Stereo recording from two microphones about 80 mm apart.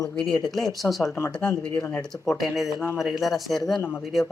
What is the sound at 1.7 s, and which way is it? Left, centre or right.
Speech, left.